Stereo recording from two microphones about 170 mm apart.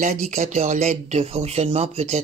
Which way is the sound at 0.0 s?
40° right (ahead or behind).